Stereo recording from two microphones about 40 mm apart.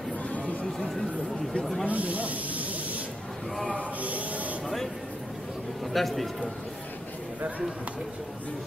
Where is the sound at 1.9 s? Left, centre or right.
Right.